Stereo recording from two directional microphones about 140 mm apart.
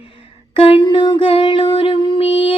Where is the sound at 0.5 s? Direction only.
40° left (ahead or behind).